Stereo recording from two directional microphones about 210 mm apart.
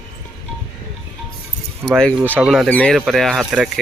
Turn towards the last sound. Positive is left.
turn(degrees=0)  # may be behind; listen again after turning